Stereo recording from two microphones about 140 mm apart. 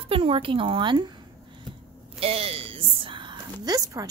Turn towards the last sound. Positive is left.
turn(degrees=-25)  # may be behind; listen again after turning